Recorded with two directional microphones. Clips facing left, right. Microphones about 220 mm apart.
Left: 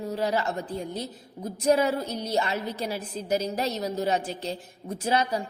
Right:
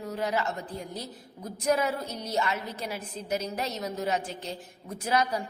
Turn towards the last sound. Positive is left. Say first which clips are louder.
# left 2 dB
turn(degrees=30)  # may be behind; listen again after turning